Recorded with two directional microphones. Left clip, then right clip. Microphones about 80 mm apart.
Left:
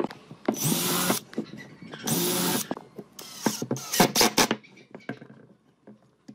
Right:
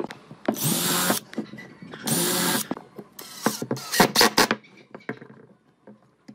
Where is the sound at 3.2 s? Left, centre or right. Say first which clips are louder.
Right 3 dB; centre.